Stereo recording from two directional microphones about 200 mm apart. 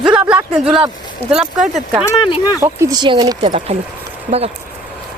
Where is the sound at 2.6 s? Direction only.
15° right (ahead or behind).